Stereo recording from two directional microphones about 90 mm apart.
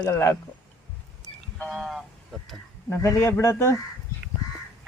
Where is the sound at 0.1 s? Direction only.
30° left (ahead or behind).